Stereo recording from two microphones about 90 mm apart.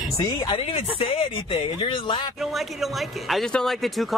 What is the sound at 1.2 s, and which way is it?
Speech, 90° left.